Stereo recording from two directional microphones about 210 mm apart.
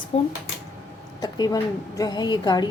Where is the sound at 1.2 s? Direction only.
20° left (ahead or behind).